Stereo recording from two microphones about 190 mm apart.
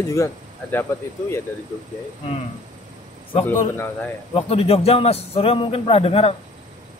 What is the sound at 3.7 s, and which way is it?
Speech, 10° left (ahead or behind).